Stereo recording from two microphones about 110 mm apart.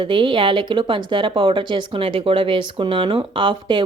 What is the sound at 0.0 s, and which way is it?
Speech, 50° right (ahead or behind).